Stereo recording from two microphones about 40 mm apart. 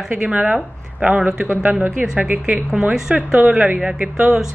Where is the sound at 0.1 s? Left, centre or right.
Right.